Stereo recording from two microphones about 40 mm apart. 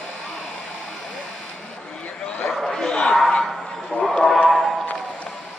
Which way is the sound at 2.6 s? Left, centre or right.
Centre.